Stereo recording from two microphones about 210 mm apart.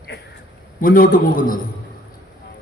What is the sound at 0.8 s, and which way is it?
Speech, 40° left (ahead or behind).